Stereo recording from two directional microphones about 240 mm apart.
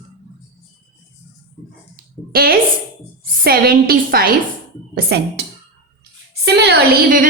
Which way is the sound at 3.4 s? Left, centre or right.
Right.